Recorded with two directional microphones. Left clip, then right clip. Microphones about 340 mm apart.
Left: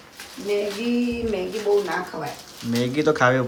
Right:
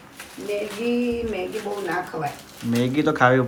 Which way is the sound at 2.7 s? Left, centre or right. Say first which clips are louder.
Left 1 dB; centre.